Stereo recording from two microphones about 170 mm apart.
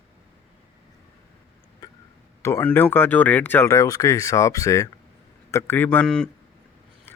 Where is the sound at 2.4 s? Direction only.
15° left (ahead or behind).